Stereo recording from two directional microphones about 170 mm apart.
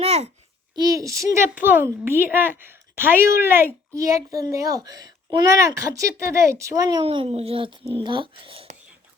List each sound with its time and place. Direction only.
0.0 s a sound: 40° right (ahead or behind)
0.8 s speech: 20° right (ahead or behind)
7.0 s a child's voice: 35° right (ahead or behind)